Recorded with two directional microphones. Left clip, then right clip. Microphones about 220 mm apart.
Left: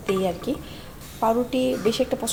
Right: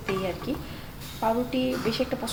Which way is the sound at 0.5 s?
35° left (ahead or behind).